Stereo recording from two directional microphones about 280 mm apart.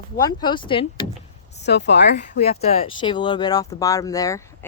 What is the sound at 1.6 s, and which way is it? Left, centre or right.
Speech, left.